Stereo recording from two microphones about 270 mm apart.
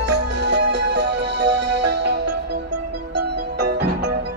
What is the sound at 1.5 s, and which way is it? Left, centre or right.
Music, right.